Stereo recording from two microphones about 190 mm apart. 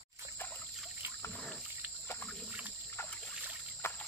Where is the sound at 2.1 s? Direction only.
5° left (ahead or behind).